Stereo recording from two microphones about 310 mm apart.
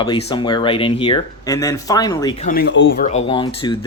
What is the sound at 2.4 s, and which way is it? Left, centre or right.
Speech, left.